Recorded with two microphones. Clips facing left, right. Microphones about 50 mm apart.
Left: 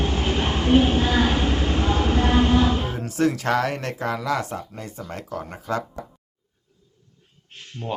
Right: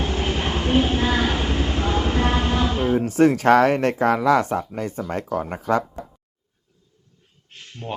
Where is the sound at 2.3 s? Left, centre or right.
Centre.